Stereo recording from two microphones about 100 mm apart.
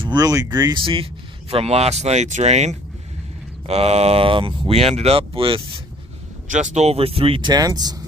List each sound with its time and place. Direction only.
0.0 s speech: 45° right (ahead or behind)
1.5 s speech: 85° right; by 5.6 s 65° right (ahead or behind)
6.8 s speech: 85° right
7.4 s speech: 40° right (ahead or behind)